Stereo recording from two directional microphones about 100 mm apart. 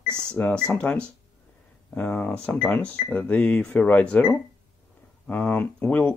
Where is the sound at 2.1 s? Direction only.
10° left (ahead or behind).